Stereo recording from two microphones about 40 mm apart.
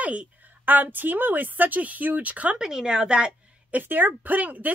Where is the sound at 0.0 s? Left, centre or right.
Right.